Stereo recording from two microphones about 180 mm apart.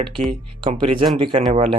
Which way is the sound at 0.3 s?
35° right (ahead or behind).